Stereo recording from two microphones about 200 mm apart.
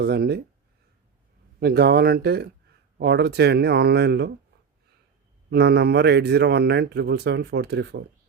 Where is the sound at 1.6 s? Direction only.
50° right (ahead or behind).